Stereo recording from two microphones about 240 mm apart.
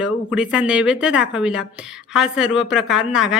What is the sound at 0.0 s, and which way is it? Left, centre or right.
A woman's voice, centre.